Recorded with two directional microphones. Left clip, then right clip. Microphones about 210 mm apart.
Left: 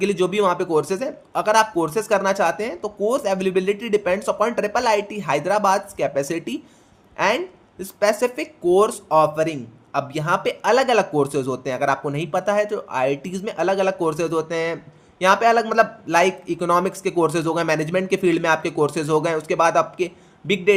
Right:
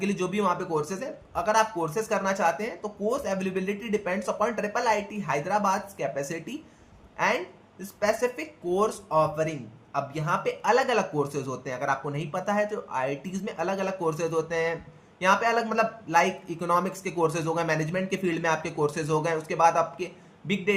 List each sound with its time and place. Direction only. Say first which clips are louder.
0.0 s speech: left 8 dB; 45° left (ahead or behind)